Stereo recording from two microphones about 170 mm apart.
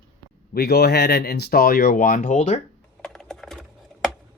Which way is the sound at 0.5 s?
70° left (ahead or behind).